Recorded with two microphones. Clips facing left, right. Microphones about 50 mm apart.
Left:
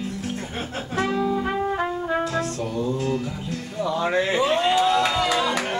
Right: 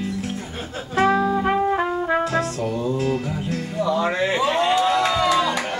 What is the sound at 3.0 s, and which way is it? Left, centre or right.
Music, right.